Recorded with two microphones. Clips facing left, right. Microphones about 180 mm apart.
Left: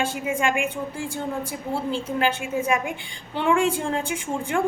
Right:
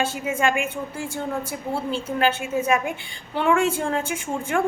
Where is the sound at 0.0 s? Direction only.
15° left (ahead or behind).